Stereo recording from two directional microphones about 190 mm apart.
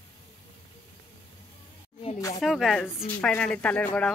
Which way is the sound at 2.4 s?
Centre (ahead or behind).